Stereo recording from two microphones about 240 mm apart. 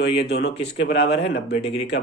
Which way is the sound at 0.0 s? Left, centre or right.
Left.